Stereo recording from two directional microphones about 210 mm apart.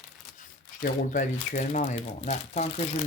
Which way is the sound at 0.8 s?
35° left (ahead or behind).